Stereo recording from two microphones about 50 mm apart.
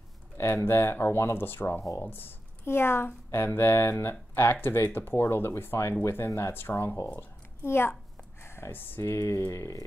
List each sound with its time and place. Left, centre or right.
0.4 s speech: left
5.1 s a woman's voice: left
9.0 s speech: left